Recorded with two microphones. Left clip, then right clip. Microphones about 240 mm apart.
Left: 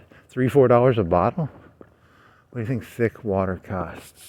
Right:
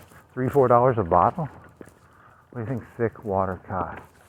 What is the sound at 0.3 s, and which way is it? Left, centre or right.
Speech, left.